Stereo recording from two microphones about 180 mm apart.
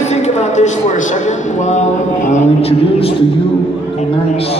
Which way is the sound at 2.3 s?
35° left (ahead or behind).